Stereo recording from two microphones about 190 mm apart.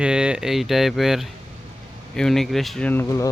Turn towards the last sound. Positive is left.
turn(degrees=10)  # may be behind; listen again after turning